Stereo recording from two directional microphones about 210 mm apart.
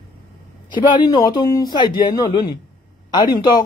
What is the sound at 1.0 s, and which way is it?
Speech, 20° left (ahead or behind).